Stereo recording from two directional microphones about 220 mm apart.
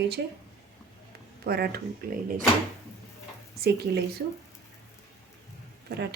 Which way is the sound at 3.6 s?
45° right (ahead or behind).